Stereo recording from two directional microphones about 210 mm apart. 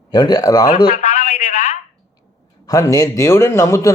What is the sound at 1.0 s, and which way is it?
Speech, 35° left (ahead or behind).